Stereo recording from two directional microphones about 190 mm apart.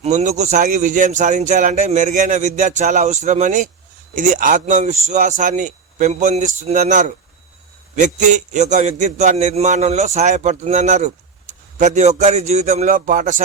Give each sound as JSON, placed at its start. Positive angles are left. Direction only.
{"t": 0.0, "sound": "a man's voice", "side_deg": -35}